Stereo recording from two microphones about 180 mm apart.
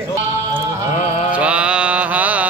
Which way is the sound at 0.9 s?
40° left (ahead or behind).